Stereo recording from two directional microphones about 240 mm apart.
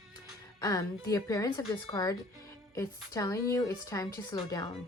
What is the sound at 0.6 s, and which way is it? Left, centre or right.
Speech, centre.